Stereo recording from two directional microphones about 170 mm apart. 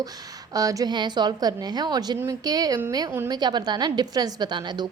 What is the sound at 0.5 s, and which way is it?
A woman's voice, 20° right (ahead or behind).